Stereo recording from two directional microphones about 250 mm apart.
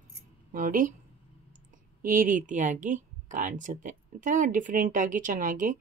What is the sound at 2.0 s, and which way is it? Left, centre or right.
Speech, right.